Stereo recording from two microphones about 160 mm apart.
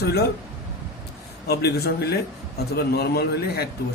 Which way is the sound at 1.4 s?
80° left.